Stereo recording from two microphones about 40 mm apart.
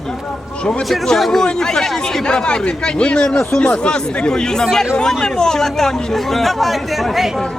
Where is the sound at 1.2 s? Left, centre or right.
Centre.